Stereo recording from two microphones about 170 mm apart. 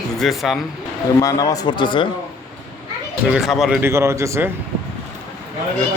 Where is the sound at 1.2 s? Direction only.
20° left (ahead or behind).